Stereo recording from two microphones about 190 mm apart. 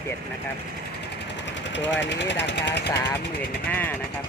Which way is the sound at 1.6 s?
70° left (ahead or behind).